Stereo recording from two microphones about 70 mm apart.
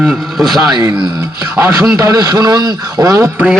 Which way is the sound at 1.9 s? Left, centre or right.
Right.